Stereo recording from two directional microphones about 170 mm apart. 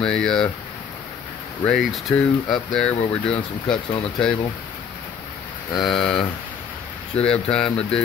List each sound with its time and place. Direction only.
0.0 s speech: 5° left (ahead or behind)
1.6 s speech: centre (ahead or behind)
5.8 s speech: 5° left (ahead or behind)